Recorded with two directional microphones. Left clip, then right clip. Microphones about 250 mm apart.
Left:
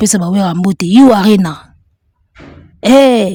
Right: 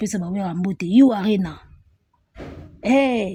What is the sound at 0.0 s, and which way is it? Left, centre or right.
Speech, left.